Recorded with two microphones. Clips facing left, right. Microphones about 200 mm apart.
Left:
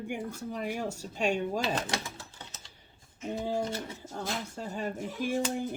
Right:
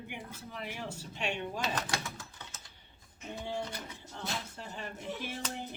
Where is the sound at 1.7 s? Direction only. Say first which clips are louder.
Left 3 dB; 30° left (ahead or behind).